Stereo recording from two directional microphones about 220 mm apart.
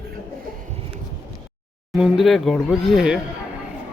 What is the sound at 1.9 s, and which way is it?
Speech, centre (ahead or behind).